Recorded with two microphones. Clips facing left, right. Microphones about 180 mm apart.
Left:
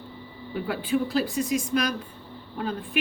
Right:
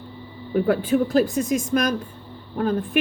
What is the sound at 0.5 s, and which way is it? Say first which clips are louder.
Speech: right 7 dB; 45° right (ahead or behind).